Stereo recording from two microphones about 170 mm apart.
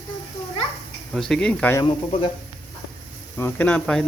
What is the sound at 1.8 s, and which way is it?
Speech, 25° left (ahead or behind).